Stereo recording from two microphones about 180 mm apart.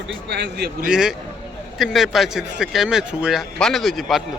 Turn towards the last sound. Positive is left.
turn(degrees=0)  # may be behind; listen again after turning